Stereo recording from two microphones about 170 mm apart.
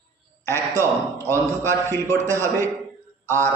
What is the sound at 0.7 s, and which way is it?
A man's voice, 20° right (ahead or behind).